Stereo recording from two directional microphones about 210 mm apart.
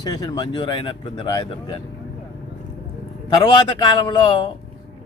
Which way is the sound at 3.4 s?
25° left (ahead or behind).